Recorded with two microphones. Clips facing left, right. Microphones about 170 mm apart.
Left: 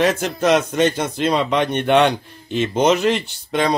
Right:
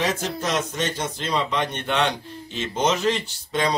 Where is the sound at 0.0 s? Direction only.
60° left (ahead or behind).